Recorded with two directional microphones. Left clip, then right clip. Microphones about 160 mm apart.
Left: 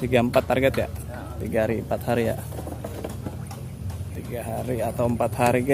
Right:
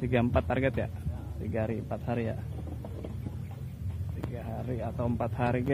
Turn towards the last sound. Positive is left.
turn(degrees=20)  # may be behind; listen again after turning